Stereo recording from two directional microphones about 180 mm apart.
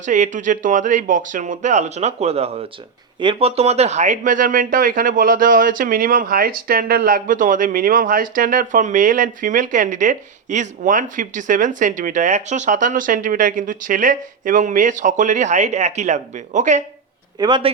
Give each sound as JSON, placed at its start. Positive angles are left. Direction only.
{"t": 0.0, "sound": "speech", "side_deg": -45}
{"t": 17.3, "sound": "a man's voice", "side_deg": -25}